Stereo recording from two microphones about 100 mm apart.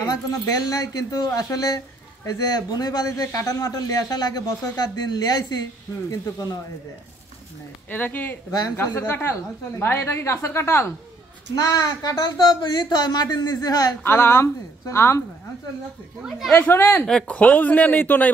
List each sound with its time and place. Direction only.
0.0 s speech: 40° left (ahead or behind)
7.9 s a woman's voice: 15° left (ahead or behind)
8.5 s speech: 40° left (ahead or behind)
8.7 s a woman's voice: 20° left (ahead or behind)
11.5 s speech: 40° left (ahead or behind)
14.0 s a woman's voice: 25° left (ahead or behind)
16.2 s a woman's voice: 5° right (ahead or behind)
16.5 s a woman's voice: 20° left (ahead or behind)